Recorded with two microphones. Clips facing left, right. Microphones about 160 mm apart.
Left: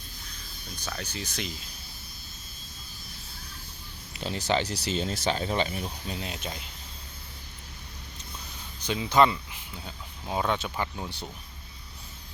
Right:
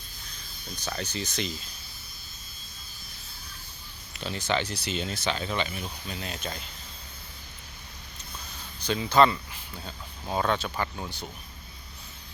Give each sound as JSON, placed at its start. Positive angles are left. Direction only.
{"t": 1.1, "sound": "speech", "side_deg": 5}
{"t": 4.2, "sound": "speech", "side_deg": 35}
{"t": 6.3, "sound": "speech", "side_deg": 15}
{"t": 8.8, "sound": "speech", "side_deg": 20}